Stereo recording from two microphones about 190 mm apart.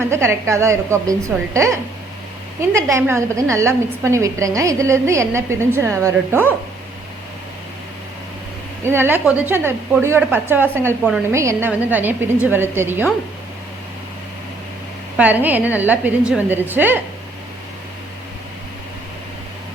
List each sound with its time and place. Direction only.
0.1 s a woman's voice: 15° right (ahead or behind)
8.8 s a woman's voice: 10° right (ahead or behind)
15.2 s a woman's voice: 10° right (ahead or behind)